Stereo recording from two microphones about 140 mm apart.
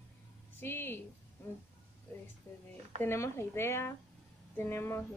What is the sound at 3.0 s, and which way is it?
A woman's voice, 15° left (ahead or behind).